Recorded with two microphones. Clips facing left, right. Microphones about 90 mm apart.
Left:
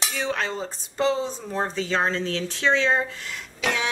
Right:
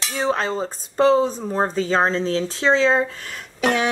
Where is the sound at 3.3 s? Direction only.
50° right (ahead or behind).